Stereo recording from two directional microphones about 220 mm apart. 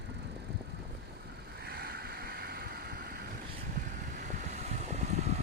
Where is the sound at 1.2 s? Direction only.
45° right (ahead or behind).